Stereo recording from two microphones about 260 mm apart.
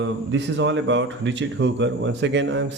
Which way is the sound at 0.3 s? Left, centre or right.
Right.